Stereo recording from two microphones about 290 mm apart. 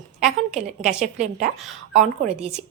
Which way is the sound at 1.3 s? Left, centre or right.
Right.